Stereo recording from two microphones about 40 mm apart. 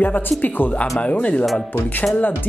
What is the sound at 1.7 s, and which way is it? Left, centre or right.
Speech, left.